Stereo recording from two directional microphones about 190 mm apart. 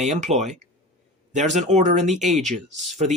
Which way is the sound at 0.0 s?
40° right (ahead or behind).